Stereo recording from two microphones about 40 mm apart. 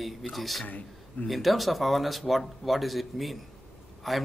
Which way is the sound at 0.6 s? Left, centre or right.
Left.